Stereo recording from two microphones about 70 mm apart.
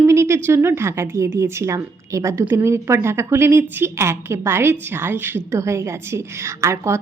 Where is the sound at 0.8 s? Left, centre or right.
Right.